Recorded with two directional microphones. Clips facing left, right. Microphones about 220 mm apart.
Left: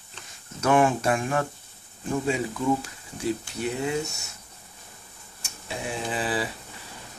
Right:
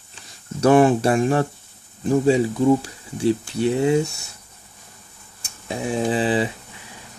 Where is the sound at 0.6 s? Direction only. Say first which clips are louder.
Right 7 dB; 35° right (ahead or behind).